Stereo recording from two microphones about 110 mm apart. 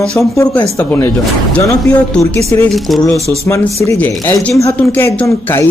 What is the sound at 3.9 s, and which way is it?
Speech, 20° left (ahead or behind).